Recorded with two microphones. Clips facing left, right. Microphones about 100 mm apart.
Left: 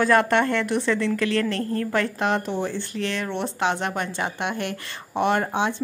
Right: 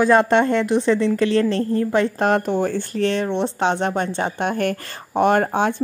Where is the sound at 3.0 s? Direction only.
30° right (ahead or behind); by 5.8 s 50° right (ahead or behind).